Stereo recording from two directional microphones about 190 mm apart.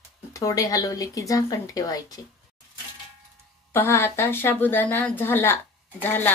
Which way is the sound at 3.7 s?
10° left (ahead or behind).